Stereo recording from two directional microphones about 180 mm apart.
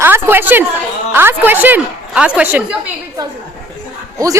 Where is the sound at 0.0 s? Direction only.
10° right (ahead or behind).